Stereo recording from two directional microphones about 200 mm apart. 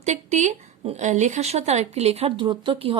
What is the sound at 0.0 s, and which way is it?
A woman's voice, 35° right (ahead or behind).